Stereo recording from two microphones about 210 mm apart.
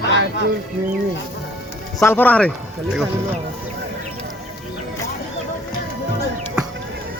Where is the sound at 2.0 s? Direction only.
10° left (ahead or behind).